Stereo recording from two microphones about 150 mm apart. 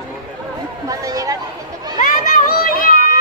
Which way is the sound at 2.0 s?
70° left (ahead or behind).